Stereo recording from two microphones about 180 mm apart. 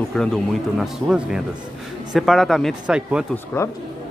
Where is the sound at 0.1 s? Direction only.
5° left (ahead or behind).